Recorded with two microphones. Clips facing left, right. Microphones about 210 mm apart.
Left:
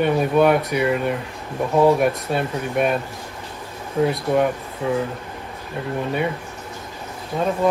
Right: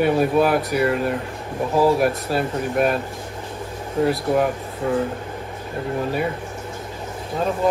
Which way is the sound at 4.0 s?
5° right (ahead or behind).